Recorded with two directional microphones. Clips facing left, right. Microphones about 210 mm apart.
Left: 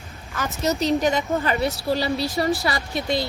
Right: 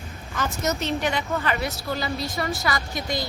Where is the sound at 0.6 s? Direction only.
35° left (ahead or behind).